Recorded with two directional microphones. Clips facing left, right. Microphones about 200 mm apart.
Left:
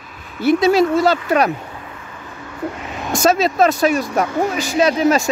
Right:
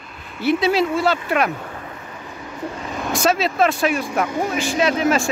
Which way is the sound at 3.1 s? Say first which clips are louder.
Left 4 dB; 45° left (ahead or behind).